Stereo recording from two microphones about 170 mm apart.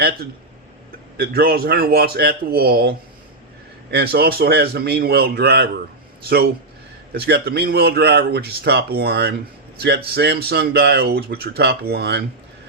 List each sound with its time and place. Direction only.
1.1 s a man's voice: 65° right (ahead or behind)
3.9 s speech: 65° right (ahead or behind)
7.1 s speech: 70° right (ahead or behind)